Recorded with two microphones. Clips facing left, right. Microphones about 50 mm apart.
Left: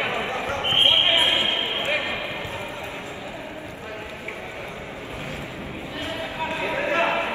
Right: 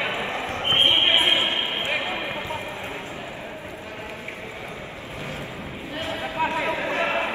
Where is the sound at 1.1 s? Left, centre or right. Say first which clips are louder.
Even; right.